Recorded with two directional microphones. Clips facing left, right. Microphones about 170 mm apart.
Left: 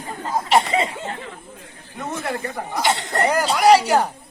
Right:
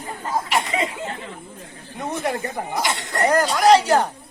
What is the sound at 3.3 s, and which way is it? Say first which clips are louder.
Speech: even; 10° left (ahead or behind).